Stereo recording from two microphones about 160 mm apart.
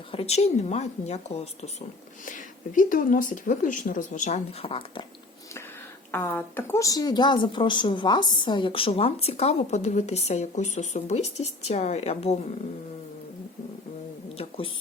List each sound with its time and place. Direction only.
0.1 s speech: 40° left (ahead or behind)
2.2 s speech: 55° left (ahead or behind)
4.6 s speech: 35° left (ahead or behind)
6.1 s speech: 15° left (ahead or behind); by 12.4 s 40° left (ahead or behind)
14.3 s a sound: 35° left (ahead or behind)